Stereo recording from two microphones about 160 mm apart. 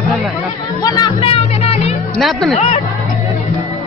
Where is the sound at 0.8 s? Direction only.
25° left (ahead or behind).